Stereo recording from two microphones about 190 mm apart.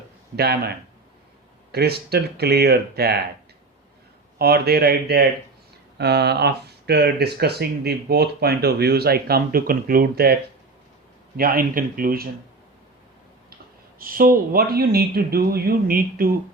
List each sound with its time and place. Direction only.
0.3 s speech: 55° right (ahead or behind)
1.7 s speech: 55° right (ahead or behind)
4.4 s speech: 55° right (ahead or behind)
11.3 s speech: 50° right (ahead or behind)
14.0 s speech: 50° right (ahead or behind)